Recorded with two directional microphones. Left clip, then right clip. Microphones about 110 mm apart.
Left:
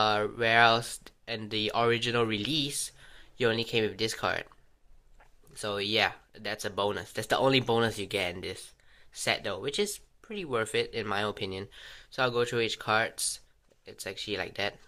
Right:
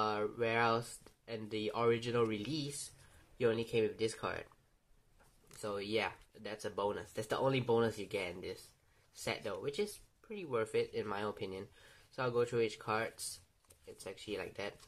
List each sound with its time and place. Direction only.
0.0 s speech: 15° left (ahead or behind)
5.6 s speech: 10° left (ahead or behind)